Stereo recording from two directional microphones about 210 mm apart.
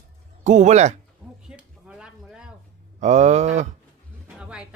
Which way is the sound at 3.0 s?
35° right (ahead or behind).